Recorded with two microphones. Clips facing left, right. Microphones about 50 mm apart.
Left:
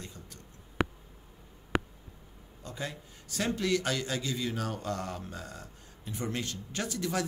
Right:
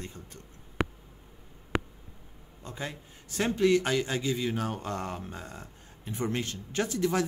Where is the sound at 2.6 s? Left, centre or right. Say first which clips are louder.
Right 1 dB; right.